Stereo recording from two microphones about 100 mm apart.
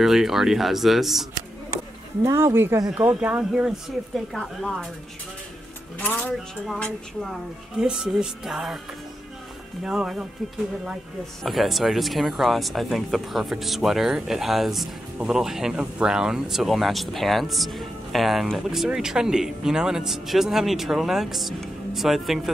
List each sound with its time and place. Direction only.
0.0 s speech: 5° right (ahead or behind)
2.2 s speech: 30° right (ahead or behind); by 3.7 s 15° right (ahead or behind)
4.3 s speech: centre (ahead or behind)
5.9 s speech: 15° left (ahead or behind)
6.6 s speech: centre (ahead or behind)
9.8 s speech: 5° right (ahead or behind)
11.4 s speech: centre (ahead or behind)